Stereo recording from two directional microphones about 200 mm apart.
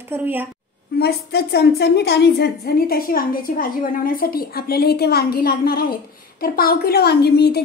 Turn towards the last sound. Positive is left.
turn(degrees=55)  # may be behind; listen again after turning